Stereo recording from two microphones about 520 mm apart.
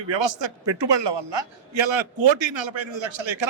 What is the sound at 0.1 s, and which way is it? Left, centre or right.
A man's voice, right.